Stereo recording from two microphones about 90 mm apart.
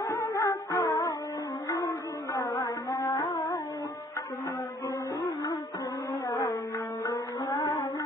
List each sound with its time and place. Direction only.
0.0 s music: 35° left (ahead or behind)
2.3 s carnatic music: 40° left (ahead or behind)
6.2 s a sound: 40° left (ahead or behind)
7.1 s music: 45° left (ahead or behind)